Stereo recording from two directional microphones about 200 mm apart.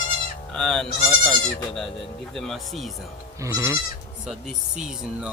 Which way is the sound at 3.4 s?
15° right (ahead or behind).